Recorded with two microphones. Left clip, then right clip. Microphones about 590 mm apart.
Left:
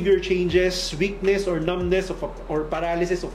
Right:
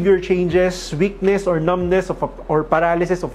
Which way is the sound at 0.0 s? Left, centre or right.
Right.